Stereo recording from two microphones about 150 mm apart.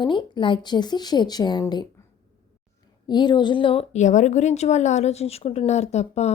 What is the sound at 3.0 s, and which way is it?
A woman's voice, 30° left (ahead or behind).